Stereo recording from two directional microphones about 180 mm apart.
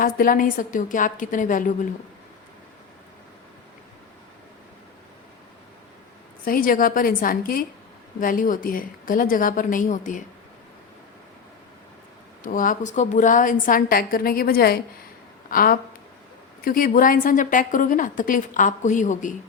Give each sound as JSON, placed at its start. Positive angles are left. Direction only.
{"t": 0.0, "sound": "a woman's voice", "side_deg": 50}
{"t": 6.4, "sound": "a woman's voice", "side_deg": 50}
{"t": 12.4, "sound": "a woman's voice", "side_deg": 50}